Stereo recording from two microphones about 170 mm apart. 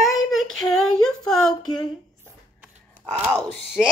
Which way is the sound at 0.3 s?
Centre (ahead or behind).